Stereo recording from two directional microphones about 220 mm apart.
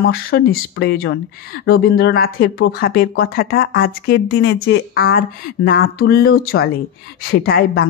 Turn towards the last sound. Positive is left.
turn(degrees=45)  # may be behind; listen again after turning